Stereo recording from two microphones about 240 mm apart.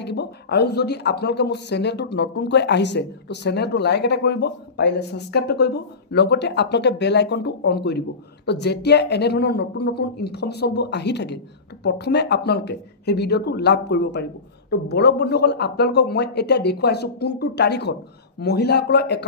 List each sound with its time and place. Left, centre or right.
0.0 s speech: left